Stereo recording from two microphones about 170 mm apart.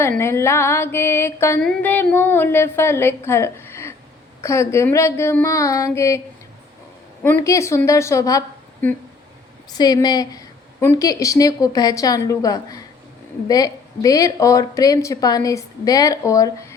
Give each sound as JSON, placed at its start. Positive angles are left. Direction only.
{"t": 0.2, "sound": "a woman's voice", "side_deg": 15}